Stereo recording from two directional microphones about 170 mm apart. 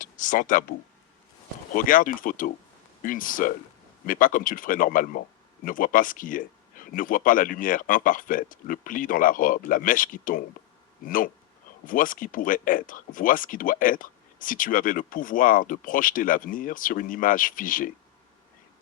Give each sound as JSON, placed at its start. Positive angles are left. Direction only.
{"t": 0.0, "sound": "speech", "side_deg": 50}
{"t": 1.7, "sound": "speech", "side_deg": 55}